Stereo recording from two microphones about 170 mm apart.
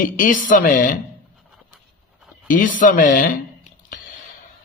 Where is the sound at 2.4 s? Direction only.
50° left (ahead or behind).